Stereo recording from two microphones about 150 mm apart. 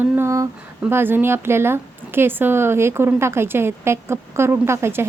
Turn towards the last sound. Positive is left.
turn(degrees=-15)  # may be behind; listen again after turning